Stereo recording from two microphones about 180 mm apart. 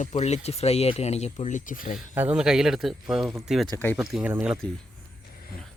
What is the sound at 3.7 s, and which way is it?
Speech, 10° left (ahead or behind).